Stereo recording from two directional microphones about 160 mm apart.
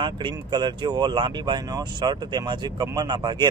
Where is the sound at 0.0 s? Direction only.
30° right (ahead or behind).